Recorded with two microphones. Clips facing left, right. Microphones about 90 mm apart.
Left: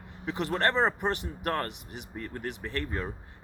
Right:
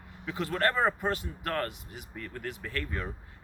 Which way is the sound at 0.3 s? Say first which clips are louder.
Left 1 dB; 25° left (ahead or behind).